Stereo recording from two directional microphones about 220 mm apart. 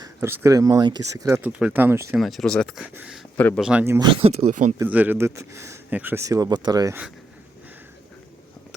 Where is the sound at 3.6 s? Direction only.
5° right (ahead or behind).